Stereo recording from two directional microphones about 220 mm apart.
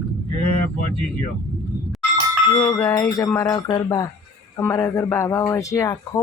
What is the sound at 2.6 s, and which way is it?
A man's voice, 20° left (ahead or behind).